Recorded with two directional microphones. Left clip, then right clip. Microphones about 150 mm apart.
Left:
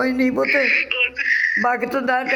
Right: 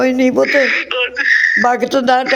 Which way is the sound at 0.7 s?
60° right (ahead or behind).